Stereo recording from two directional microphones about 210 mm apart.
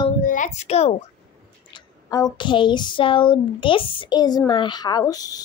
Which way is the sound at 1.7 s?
20° left (ahead or behind).